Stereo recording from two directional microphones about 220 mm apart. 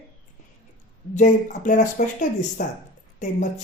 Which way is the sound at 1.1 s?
35° left (ahead or behind).